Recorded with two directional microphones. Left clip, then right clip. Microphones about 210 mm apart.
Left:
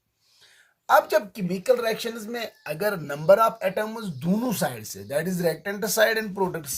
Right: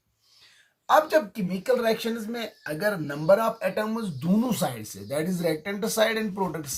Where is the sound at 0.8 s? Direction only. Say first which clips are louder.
Left 1 dB; 45° left (ahead or behind).